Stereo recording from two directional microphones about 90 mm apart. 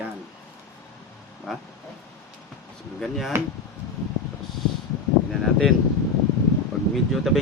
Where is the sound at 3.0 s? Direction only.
Centre (ahead or behind).